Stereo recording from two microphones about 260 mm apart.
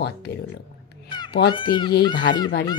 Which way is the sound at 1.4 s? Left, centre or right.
Centre.